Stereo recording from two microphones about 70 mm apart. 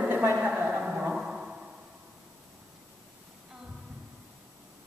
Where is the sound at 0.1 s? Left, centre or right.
Right.